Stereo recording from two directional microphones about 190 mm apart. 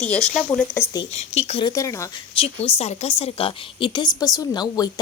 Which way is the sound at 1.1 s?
35° left (ahead or behind).